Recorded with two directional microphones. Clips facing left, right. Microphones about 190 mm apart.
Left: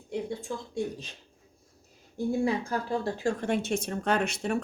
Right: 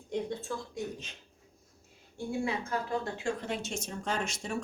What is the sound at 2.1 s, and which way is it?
Speech, 35° left (ahead or behind).